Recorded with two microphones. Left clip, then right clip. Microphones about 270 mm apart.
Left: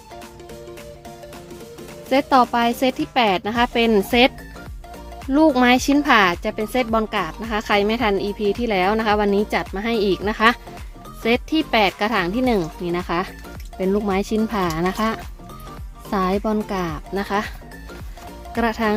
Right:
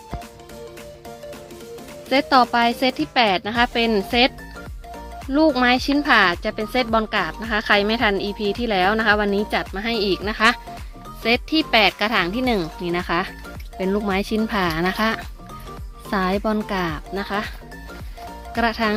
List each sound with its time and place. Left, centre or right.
2.0 s speech: centre
5.5 s speech: centre
18.5 s speech: centre